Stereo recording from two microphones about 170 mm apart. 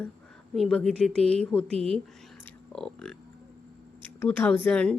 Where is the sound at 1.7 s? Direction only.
35° right (ahead or behind).